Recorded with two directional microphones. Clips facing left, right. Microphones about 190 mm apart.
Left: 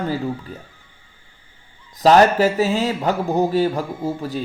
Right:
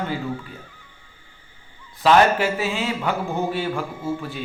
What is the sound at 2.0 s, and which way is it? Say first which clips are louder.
A man's voice: left 3 dB; 40° left (ahead or behind).